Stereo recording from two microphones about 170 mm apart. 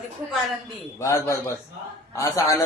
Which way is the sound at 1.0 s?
15° left (ahead or behind).